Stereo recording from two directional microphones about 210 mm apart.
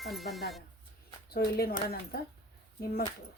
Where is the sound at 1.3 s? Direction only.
45° left (ahead or behind).